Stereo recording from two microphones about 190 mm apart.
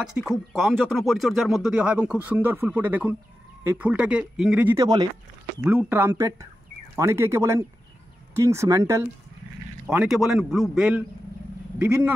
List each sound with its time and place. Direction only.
0.2 s speech: 10° right (ahead or behind)
0.5 s speech: centre (ahead or behind); by 9.0 s 15° right (ahead or behind)
9.8 s speech: 5° right (ahead or behind)